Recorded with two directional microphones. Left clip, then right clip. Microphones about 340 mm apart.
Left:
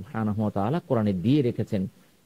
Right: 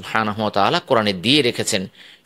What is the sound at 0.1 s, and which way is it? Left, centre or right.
A man's voice, centre.